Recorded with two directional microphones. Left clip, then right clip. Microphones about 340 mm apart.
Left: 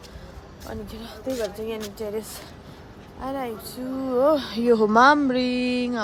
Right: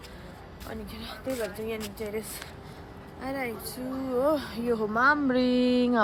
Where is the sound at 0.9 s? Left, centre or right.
Centre.